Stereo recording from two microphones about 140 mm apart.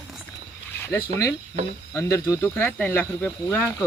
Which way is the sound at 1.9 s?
20° left (ahead or behind).